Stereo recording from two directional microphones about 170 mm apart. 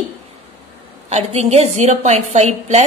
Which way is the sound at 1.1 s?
40° right (ahead or behind).